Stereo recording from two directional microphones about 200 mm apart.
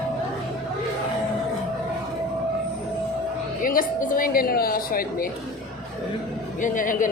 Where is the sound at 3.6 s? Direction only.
45° left (ahead or behind).